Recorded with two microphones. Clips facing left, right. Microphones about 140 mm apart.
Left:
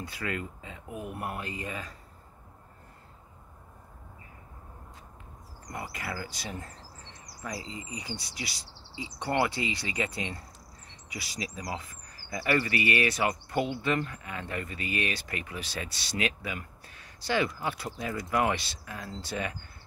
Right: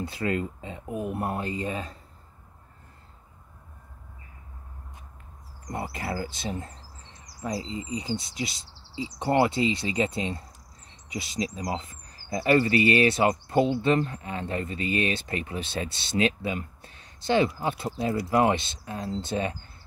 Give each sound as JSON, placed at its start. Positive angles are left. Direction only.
{"t": 0.0, "sound": "speech", "side_deg": -25}
{"t": 5.7, "sound": "speech", "side_deg": -30}